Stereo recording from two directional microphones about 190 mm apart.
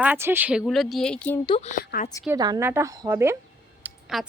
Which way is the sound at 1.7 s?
45° left (ahead or behind).